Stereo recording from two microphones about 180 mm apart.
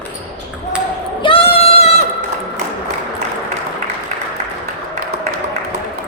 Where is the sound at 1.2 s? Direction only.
30° left (ahead or behind).